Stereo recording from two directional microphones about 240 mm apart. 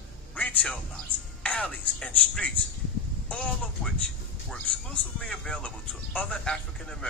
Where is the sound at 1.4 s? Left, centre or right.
Centre.